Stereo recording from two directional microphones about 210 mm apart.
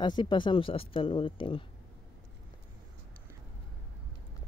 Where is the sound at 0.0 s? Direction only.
20° left (ahead or behind).